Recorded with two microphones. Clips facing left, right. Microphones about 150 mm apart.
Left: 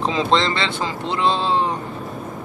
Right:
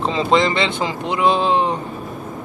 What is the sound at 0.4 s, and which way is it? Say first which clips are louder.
Speech: right 4 dB; 15° right (ahead or behind).